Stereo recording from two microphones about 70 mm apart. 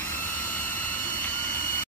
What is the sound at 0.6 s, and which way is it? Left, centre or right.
Jet engine, left.